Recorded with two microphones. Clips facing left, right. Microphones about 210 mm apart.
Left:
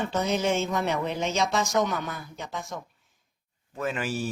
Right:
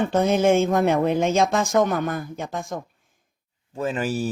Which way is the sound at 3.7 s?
35° right (ahead or behind).